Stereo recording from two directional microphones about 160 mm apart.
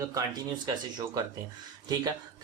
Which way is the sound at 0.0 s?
25° right (ahead or behind).